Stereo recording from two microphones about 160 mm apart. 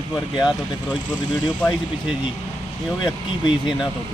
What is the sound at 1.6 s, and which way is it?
Speech, 10° left (ahead or behind).